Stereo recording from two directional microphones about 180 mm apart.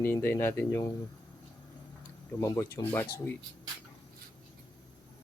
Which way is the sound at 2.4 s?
15° left (ahead or behind).